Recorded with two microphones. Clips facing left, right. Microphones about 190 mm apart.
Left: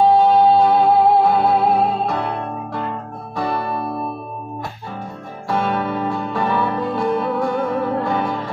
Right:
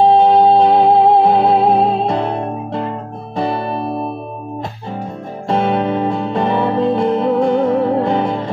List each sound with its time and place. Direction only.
0.4 s music: 25° right (ahead or behind)
5.5 s music: 25° right (ahead or behind)